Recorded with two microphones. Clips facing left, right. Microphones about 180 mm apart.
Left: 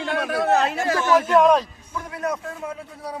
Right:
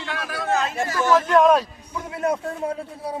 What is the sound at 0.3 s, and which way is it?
Speech, 65° left (ahead or behind).